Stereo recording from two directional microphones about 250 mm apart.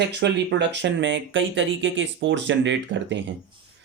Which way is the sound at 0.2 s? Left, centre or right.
Right.